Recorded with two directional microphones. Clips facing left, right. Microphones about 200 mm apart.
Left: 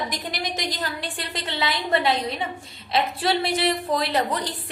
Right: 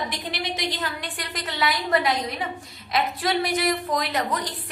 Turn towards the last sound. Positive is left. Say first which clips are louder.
# left 2 dB
turn(degrees=30)  # may be behind; listen again after turning